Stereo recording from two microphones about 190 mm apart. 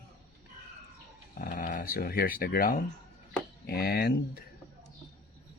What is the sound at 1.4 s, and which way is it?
Speech, 50° left (ahead or behind).